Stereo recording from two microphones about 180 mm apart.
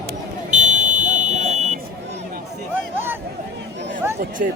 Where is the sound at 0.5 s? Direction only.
40° right (ahead or behind).